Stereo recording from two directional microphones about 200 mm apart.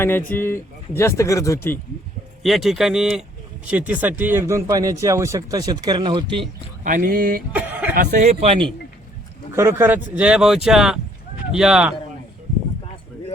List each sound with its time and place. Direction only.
0.0 s speech: 10° left (ahead or behind)
2.4 s speech: centre (ahead or behind); by 6.4 s 25° right (ahead or behind)
6.8 s a sound: 45° right (ahead or behind)
7.5 s a sound: 10° right (ahead or behind)
7.9 s speech: 40° right (ahead or behind)
9.5 s speech: 15° right (ahead or behind)